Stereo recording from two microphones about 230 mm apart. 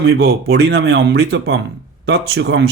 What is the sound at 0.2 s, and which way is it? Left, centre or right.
Speech, right.